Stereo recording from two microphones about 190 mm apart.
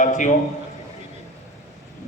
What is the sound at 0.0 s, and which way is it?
Speech, 40° left (ahead or behind).